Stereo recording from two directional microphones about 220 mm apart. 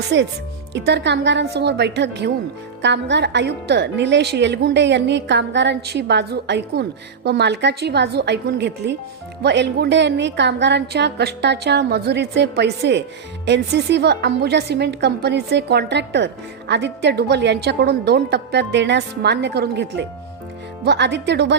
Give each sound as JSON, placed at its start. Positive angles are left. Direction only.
{"t": 0.1, "sound": "a woman's voice", "side_deg": -55}